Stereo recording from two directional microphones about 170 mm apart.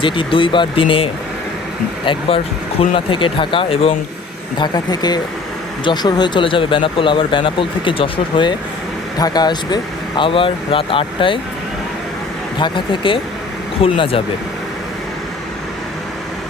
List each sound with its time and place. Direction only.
0.0 s speech: 30° left (ahead or behind)
12.5 s speech: 30° left (ahead or behind)